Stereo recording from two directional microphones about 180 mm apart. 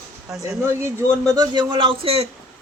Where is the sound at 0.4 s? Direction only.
15° right (ahead or behind); by 2.2 s 30° right (ahead or behind).